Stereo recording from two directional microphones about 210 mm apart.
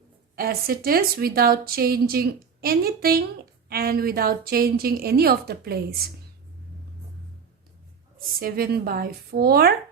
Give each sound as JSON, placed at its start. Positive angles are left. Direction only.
{"t": 0.3, "sound": "a woman's voice", "side_deg": -45}
{"t": 8.4, "sound": "a woman's voice", "side_deg": -45}